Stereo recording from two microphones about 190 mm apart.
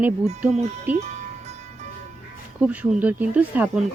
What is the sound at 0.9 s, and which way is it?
Music, 35° right (ahead or behind).